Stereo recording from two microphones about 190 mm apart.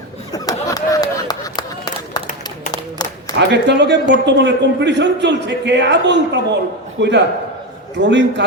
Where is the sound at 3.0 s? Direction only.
20° left (ahead or behind).